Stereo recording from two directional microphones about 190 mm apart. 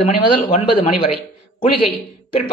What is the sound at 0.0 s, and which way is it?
Speech, 30° left (ahead or behind).